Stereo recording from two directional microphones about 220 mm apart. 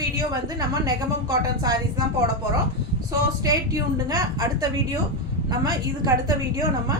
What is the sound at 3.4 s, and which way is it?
A woman's voice, 15° right (ahead or behind).